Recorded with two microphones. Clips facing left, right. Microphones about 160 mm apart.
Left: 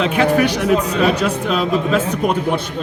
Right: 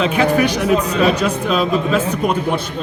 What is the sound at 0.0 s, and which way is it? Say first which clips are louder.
Speech: even; 60° left (ahead or behind).